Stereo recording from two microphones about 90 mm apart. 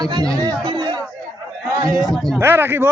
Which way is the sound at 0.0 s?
45° right (ahead or behind).